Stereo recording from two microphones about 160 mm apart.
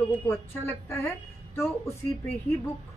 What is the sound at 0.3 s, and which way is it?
Speech, 15° left (ahead or behind).